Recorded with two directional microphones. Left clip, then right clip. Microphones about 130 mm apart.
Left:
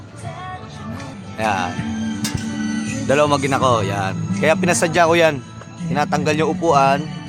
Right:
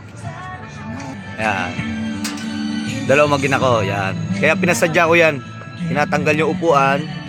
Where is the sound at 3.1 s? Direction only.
5° left (ahead or behind).